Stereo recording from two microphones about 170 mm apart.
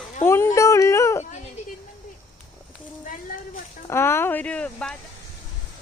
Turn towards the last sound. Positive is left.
turn(degrees=5)  # may be behind; listen again after turning